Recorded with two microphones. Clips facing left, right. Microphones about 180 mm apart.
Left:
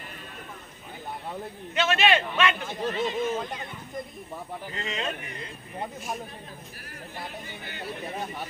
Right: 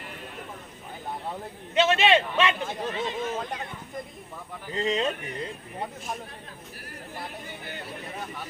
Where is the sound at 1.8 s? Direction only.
25° right (ahead or behind).